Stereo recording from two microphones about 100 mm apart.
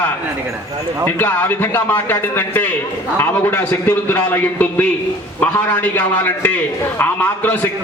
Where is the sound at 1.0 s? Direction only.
20° left (ahead or behind).